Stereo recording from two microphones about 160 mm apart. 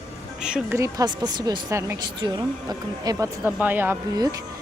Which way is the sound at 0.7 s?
20° right (ahead or behind).